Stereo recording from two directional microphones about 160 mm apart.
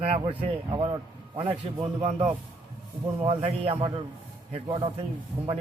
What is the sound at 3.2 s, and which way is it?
Speech, 35° right (ahead or behind).